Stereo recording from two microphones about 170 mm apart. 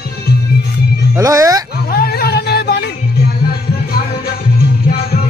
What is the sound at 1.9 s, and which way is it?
Music, 65° left (ahead or behind).